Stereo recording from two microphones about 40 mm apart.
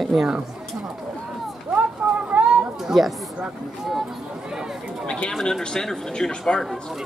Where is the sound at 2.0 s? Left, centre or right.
Centre.